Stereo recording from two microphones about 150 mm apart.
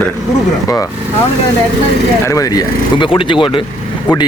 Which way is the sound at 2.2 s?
20° left (ahead or behind).